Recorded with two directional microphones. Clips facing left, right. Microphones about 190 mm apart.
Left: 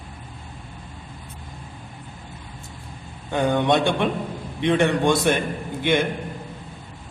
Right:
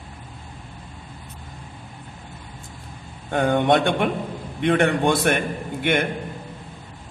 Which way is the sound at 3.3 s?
55° right (ahead or behind).